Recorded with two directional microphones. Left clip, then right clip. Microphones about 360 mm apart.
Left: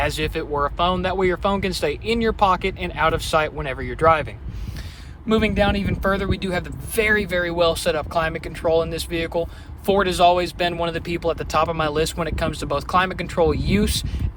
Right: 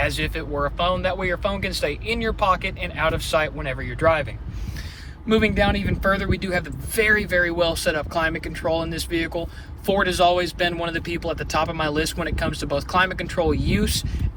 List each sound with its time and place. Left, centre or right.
0.0 s speech: centre
5.3 s speech: centre